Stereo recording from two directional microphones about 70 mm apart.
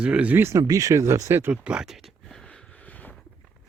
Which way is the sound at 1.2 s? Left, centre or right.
Right.